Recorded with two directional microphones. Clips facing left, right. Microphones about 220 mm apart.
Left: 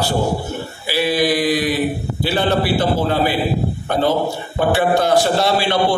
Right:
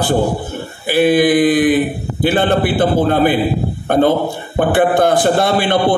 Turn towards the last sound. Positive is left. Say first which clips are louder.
# right 3 dB
turn(degrees=-50)  # may be behind; listen again after turning